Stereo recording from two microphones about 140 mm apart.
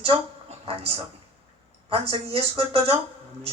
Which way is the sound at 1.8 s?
40° right (ahead or behind).